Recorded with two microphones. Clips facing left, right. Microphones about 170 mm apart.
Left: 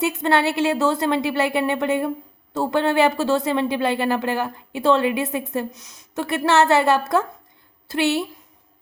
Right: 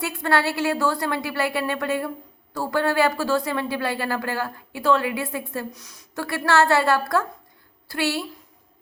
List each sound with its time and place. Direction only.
0.0 s speech: 20° left (ahead or behind)